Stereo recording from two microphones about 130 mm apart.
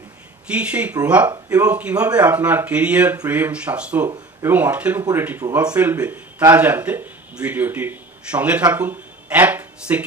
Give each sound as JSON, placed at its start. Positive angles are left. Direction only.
{"t": 0.5, "sound": "speech", "side_deg": -10}
{"t": 5.4, "sound": "speech", "side_deg": -25}
{"t": 5.7, "sound": "speech", "side_deg": -10}
{"t": 8.7, "sound": "a sound", "side_deg": -15}